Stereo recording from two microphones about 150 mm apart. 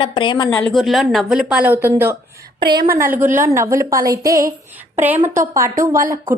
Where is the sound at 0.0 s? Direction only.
35° left (ahead or behind).